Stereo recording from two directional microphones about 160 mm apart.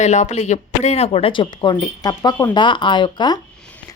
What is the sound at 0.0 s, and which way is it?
A woman's voice, 45° left (ahead or behind).